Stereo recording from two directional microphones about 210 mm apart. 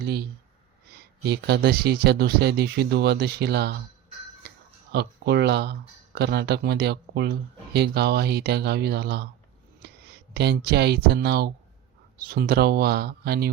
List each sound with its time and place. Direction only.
0.0 s speech: 50° right (ahead or behind)
4.9 s speech: 50° right (ahead or behind)